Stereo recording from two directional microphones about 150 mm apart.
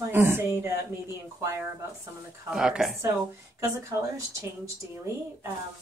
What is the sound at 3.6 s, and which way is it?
Speech, 20° right (ahead or behind).